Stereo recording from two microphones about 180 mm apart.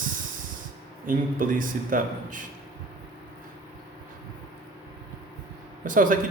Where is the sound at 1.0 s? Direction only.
50° right (ahead or behind).